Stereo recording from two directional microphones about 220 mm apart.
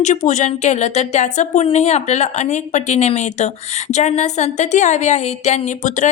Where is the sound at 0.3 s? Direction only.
35° left (ahead or behind).